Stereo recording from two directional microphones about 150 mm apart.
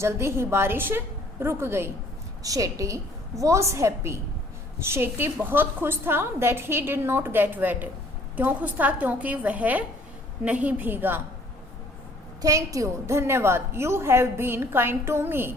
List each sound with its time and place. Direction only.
0.0 s a woman's voice: 15° right (ahead or behind)
12.4 s a woman's voice: 25° right (ahead or behind)